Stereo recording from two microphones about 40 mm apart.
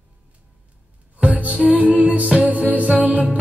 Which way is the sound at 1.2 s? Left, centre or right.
Right.